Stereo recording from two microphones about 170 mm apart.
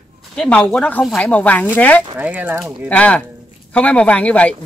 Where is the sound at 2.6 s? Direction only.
5° left (ahead or behind).